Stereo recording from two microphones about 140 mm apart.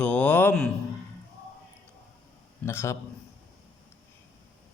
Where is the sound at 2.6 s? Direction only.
20° left (ahead or behind).